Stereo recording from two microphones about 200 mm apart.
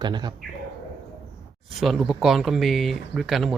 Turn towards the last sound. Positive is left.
turn(degrees=0)  # may be behind; listen again after turning